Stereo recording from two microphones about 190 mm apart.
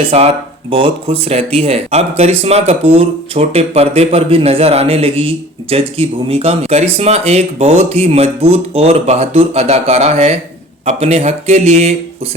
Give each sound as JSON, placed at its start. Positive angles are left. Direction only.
{"t": 0.0, "sound": "speech", "side_deg": -30}